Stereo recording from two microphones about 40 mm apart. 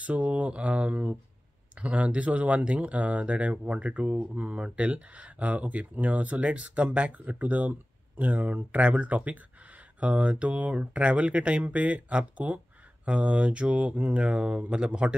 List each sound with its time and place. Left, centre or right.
0.0 s speech: right
4.7 s speech: right